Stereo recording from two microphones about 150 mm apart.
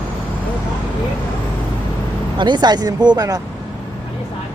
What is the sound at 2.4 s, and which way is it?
Speech, 30° right (ahead or behind).